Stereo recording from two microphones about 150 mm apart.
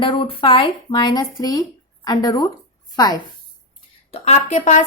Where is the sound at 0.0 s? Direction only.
35° left (ahead or behind).